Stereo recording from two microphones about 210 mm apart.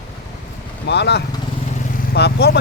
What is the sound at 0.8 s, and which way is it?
Speech, 55° left (ahead or behind).